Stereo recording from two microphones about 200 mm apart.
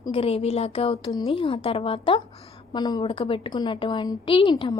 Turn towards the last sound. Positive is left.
turn(degrees=20)  # may be behind; listen again after turning